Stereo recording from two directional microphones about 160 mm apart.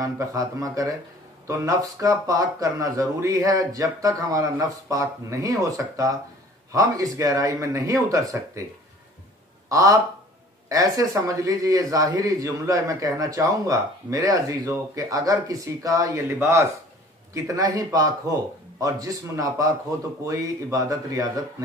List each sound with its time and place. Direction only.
0.0 s speech: 20° right (ahead or behind)
9.7 s speech: 20° right (ahead or behind)